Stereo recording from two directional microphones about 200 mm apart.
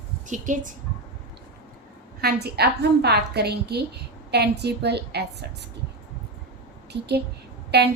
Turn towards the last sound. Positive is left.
turn(degrees=-55)  # may be behind; listen again after turning